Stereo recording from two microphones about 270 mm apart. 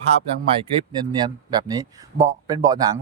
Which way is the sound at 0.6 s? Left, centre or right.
Centre.